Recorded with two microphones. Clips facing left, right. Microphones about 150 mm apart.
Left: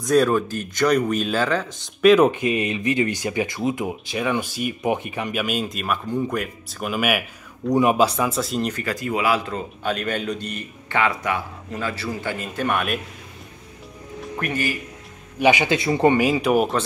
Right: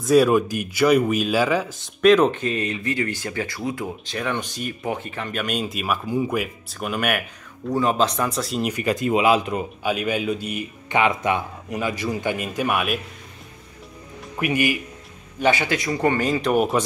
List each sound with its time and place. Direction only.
0.0 s a man's voice: 5° right (ahead or behind)
2.0 s speech: 5° left (ahead or behind)
8.7 s a man's voice: 20° right (ahead or behind)
11.0 s a man's voice: 20° right (ahead or behind); by 13.0 s 5° right (ahead or behind)
14.2 s speech: 10° right (ahead or behind)
15.3 s speech: 15° left (ahead or behind)
16.2 s speech: 10° left (ahead or behind)